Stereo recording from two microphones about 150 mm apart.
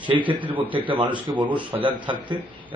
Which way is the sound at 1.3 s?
30° right (ahead or behind).